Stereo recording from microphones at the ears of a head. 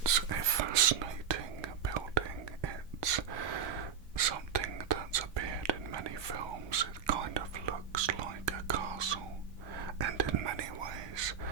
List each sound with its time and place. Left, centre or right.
0.0 s whispering: right